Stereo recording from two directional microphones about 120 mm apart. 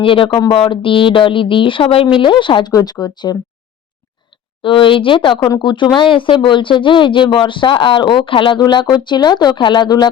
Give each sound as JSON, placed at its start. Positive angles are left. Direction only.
{"t": 0.0, "sound": "speech", "side_deg": 45}
{"t": 4.6, "sound": "speech", "side_deg": 45}